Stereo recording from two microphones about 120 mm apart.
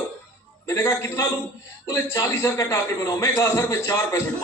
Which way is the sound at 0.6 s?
25° left (ahead or behind).